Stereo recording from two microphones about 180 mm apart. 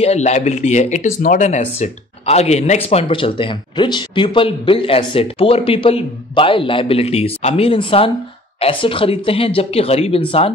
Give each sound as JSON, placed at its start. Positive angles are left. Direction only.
{"t": 0.0, "sound": "speech", "side_deg": 40}